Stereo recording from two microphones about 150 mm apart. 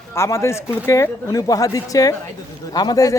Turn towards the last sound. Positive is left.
turn(degrees=25)  # may be behind; listen again after turning